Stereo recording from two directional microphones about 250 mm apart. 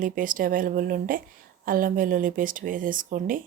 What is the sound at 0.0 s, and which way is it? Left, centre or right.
Speech, right.